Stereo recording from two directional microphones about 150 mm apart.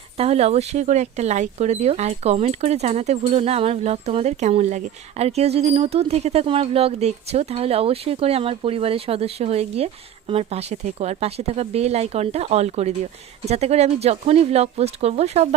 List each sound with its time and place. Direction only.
0.2 s speech: 45° right (ahead or behind)